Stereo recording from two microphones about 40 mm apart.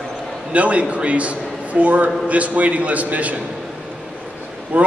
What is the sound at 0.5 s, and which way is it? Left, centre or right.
A man's voice, right.